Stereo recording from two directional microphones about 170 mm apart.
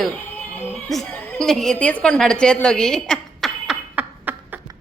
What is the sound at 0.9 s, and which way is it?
A woman's voice, centre (ahead or behind).